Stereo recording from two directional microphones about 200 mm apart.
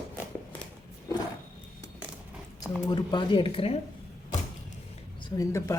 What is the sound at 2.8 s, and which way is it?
Speech, 20° left (ahead or behind).